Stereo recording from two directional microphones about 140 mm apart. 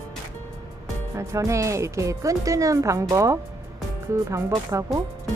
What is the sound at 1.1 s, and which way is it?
Speech, 20° right (ahead or behind).